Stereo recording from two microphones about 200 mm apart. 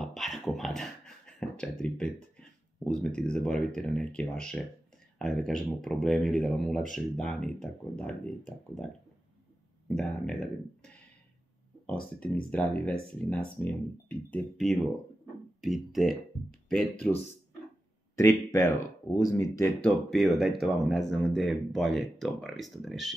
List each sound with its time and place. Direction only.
0.0 s a sound: centre (ahead or behind)
3.2 s speech: 5° left (ahead or behind)
9.8 s speech: 5° left (ahead or behind)
12.2 s speech: 5° left (ahead or behind)
19.1 s speech: 15° left (ahead or behind)
19.8 s speech: centre (ahead or behind)